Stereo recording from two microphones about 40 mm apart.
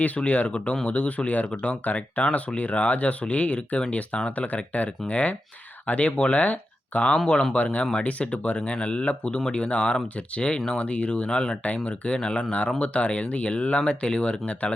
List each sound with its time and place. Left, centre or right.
0.3 s speech: left
11.6 s speech: left